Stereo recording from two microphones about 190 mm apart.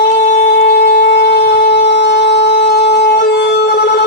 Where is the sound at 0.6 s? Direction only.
60° left (ahead or behind).